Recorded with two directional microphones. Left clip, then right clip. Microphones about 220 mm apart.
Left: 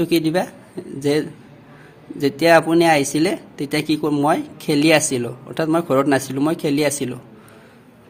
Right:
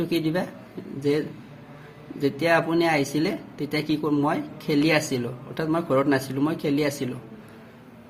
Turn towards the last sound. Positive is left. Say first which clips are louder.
# left 5 dB
turn(degrees=40)  # may be behind; listen again after turning